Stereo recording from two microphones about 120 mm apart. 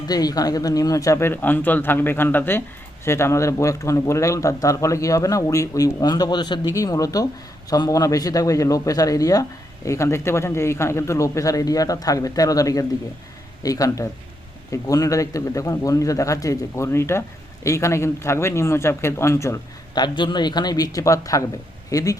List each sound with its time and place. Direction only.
0.1 s speech: 30° left (ahead or behind)
19.9 s a man's voice: 40° left (ahead or behind)